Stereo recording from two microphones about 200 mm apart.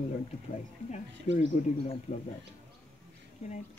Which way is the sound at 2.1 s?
30° left (ahead or behind).